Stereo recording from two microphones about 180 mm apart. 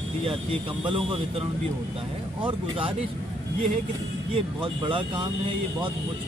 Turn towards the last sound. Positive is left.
turn(degrees=-30)  # may be behind; listen again after turning